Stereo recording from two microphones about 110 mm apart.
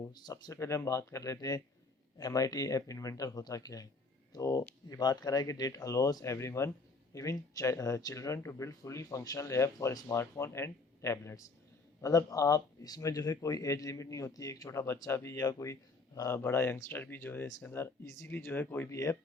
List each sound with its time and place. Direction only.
0.0 s speech: 40° left (ahead or behind); by 18.9 s 15° left (ahead or behind)